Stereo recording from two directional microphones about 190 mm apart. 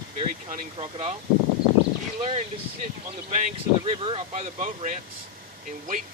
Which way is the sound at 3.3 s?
40° right (ahead or behind).